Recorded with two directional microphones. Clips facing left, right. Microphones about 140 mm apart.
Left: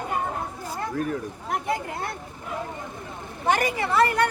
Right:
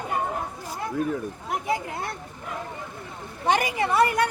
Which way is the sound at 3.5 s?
15° right (ahead or behind).